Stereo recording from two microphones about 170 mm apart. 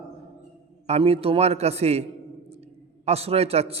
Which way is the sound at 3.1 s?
35° right (ahead or behind).